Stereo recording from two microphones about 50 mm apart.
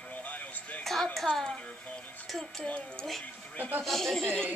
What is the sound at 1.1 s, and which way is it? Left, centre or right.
Speech, centre.